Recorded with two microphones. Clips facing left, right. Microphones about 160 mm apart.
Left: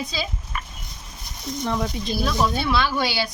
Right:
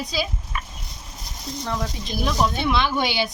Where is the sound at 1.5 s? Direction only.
35° right (ahead or behind).